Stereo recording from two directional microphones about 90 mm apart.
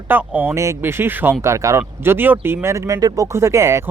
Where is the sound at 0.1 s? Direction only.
20° right (ahead or behind).